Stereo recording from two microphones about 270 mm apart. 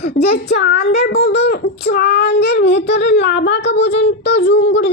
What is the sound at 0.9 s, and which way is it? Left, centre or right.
Child singing, left.